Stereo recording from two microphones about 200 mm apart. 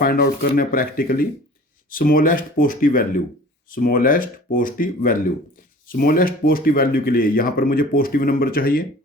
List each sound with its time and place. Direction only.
0.0 s speech: 50° left (ahead or behind)